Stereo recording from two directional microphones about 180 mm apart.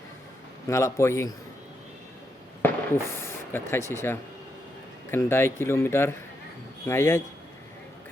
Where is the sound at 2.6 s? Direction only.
10° left (ahead or behind).